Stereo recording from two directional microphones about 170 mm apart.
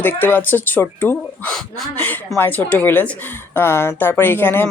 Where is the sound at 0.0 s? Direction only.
10° left (ahead or behind).